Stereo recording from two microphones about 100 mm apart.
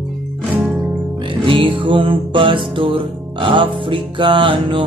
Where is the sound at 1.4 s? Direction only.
55° right (ahead or behind).